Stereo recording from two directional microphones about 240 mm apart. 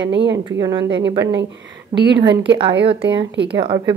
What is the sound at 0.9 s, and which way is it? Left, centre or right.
A woman's voice, right.